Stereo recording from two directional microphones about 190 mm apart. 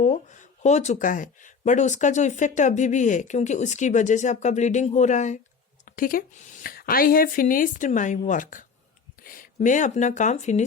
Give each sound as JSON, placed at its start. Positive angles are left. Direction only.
{"t": 0.0, "sound": "a woman's voice", "side_deg": 40}